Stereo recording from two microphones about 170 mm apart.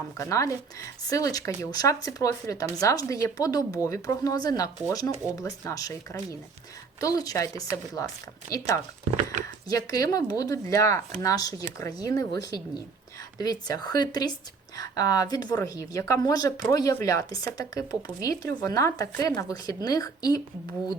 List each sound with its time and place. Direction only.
0.2 s a woman's voice: 20° left (ahead or behind)